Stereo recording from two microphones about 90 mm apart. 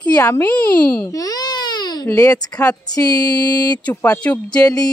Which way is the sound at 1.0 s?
40° left (ahead or behind).